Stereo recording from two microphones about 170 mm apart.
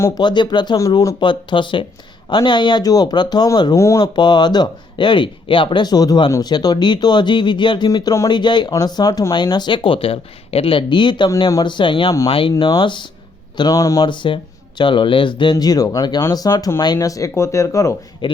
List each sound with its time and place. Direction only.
0.0 s speech: 25° left (ahead or behind)
18.2 s speech: 30° left (ahead or behind)